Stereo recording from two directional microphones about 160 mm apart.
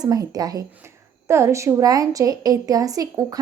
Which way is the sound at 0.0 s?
25° right (ahead or behind).